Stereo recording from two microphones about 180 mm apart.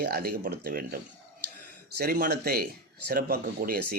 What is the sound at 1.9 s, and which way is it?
Speech, 60° right (ahead or behind).